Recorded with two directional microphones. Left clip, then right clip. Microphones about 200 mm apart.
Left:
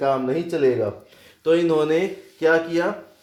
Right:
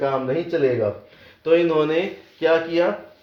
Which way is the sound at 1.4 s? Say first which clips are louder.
Right 1 dB; 45° left (ahead or behind).